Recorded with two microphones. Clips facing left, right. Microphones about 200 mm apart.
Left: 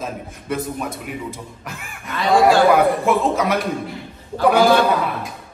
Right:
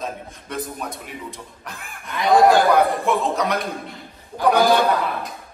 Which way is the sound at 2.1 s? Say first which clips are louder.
Even; 20° right (ahead or behind).